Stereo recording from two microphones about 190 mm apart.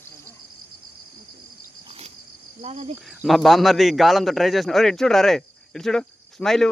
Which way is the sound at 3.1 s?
Centre (ahead or behind).